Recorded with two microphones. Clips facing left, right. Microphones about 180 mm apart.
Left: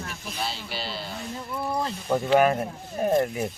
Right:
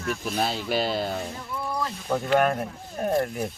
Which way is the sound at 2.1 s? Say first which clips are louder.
Left 2 dB; 5° left (ahead or behind).